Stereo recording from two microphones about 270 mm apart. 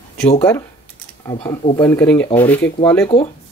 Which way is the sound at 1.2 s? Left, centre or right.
Left.